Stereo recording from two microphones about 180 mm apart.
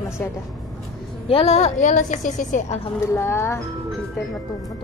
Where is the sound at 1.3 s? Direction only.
35° left (ahead or behind).